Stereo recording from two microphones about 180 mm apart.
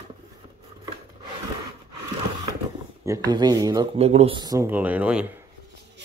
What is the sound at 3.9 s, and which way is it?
Speech, 35° right (ahead or behind).